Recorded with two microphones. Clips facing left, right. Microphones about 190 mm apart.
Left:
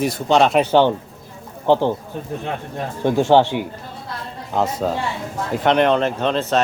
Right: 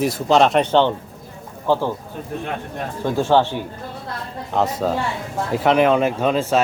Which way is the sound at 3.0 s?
20° left (ahead or behind).